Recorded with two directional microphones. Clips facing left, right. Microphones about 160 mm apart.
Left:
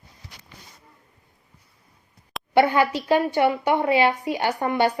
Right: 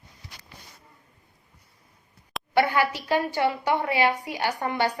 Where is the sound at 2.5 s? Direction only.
20° left (ahead or behind).